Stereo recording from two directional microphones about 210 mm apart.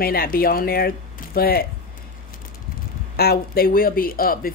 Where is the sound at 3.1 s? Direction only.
45° left (ahead or behind).